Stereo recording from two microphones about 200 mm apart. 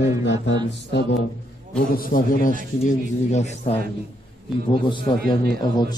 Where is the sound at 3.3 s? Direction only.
35° left (ahead or behind).